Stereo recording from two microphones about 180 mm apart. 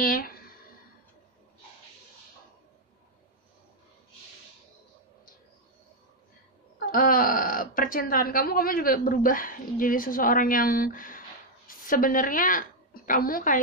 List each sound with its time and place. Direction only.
0.0 s speech: 55° left (ahead or behind)
6.9 s speech: 50° left (ahead or behind)